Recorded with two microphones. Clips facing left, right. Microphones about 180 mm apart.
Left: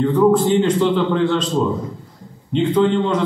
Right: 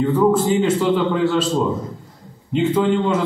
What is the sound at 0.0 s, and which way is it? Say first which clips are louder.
A man's voice: left 2 dB; 5° right (ahead or behind).